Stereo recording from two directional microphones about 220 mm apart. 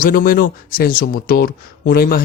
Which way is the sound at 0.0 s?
40° left (ahead or behind).